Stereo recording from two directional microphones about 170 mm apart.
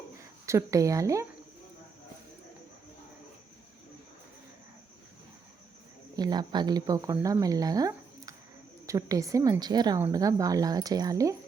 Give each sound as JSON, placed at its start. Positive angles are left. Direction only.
{"t": 0.4, "sound": "speech", "side_deg": -20}
{"t": 6.1, "sound": "speech", "side_deg": -25}